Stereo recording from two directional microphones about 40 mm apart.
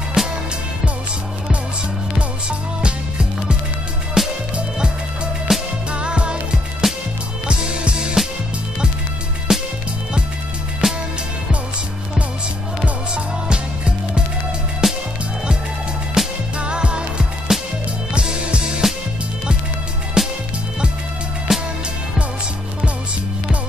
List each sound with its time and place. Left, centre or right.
0.2 s music: centre
2.8 s music: right
4.6 s music: right
6.8 s music: centre
7.4 s music: right
9.5 s music: centre
10.8 s music: centre
12.8 s music: right
14.8 s music: centre
16.2 s music: centre
16.5 s music: right
18.8 s music: centre
20.2 s music: centre
21.5 s music: centre